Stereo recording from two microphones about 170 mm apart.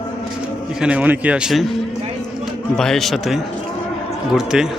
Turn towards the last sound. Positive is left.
turn(degrees=-5)  # may be behind; listen again after turning